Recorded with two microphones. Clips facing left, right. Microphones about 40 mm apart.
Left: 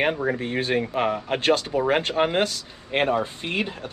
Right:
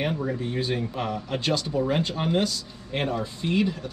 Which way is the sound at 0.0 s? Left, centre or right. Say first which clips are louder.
Left 4 dB; left.